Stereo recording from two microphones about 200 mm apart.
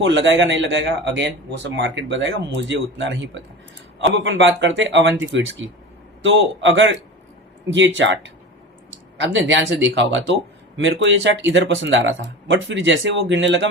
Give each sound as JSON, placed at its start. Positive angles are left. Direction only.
{"t": 0.0, "sound": "a man's voice", "side_deg": -65}